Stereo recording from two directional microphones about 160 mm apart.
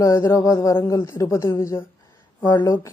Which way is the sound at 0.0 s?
20° left (ahead or behind).